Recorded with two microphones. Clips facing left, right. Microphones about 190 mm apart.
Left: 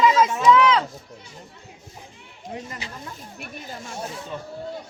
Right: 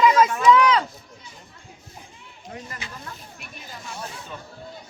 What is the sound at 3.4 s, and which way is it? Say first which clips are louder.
Speech: left 7 dB; 50° left (ahead or behind).